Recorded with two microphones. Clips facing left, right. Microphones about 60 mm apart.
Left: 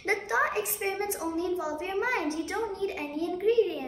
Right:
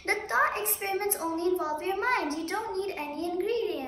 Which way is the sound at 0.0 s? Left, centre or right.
Centre.